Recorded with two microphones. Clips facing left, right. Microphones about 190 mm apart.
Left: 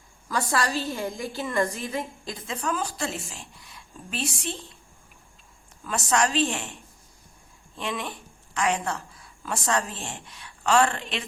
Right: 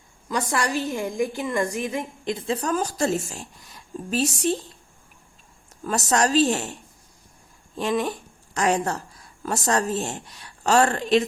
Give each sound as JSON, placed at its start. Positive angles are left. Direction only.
{"t": 0.3, "sound": "a woman's voice", "side_deg": -20}
{"t": 2.6, "sound": "a woman's voice", "side_deg": -40}
{"t": 5.8, "sound": "a woman's voice", "side_deg": -40}
{"t": 7.8, "sound": "a woman's voice", "side_deg": -40}